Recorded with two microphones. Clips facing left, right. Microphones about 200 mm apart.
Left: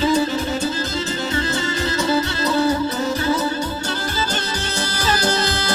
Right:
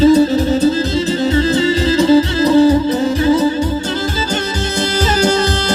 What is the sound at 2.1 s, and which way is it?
Music, 20° right (ahead or behind).